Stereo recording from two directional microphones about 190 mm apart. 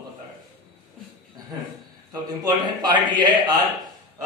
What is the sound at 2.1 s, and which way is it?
A man's voice, 20° right (ahead or behind).